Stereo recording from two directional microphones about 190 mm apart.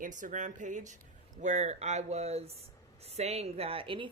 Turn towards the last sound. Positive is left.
turn(degrees=-25)  # may be behind; listen again after turning